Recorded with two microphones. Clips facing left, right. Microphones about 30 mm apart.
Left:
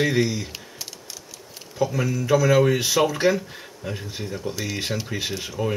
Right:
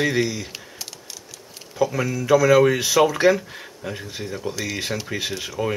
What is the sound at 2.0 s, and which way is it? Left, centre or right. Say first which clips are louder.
Speech: right 3 dB; centre.